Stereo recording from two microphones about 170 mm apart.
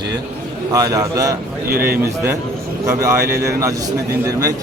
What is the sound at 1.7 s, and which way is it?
Speech, 60° right (ahead or behind).